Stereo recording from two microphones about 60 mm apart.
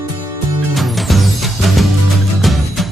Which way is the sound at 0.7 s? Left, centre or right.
Centre.